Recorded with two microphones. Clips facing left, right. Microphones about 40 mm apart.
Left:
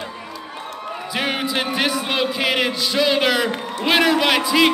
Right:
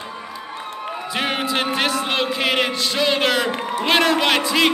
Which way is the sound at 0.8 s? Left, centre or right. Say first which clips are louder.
Even; centre.